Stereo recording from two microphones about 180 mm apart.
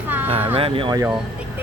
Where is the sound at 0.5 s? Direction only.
30° right (ahead or behind).